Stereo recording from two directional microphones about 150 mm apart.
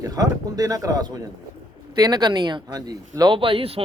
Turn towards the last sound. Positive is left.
turn(degrees=-40)  # may be behind; listen again after turning